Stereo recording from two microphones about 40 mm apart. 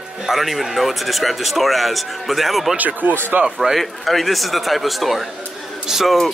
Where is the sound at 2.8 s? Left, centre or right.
Right.